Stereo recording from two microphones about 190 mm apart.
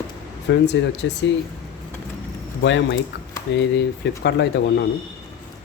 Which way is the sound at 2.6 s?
70° left (ahead or behind).